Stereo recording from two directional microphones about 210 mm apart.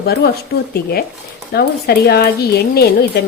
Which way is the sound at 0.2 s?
50° left (ahead or behind).